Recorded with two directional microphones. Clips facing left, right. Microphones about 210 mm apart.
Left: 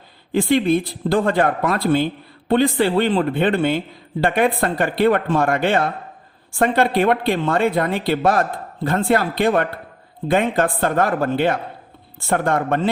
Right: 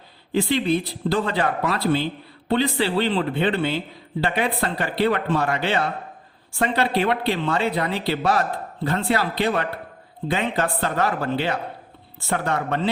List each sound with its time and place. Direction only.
0.3 s a man's voice: 50° left (ahead or behind)